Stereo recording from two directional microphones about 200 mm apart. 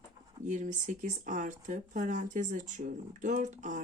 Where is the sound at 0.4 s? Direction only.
40° right (ahead or behind).